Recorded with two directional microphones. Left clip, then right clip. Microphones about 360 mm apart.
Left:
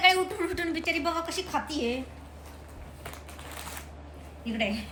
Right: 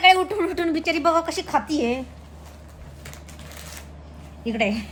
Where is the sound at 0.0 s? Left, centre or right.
Centre.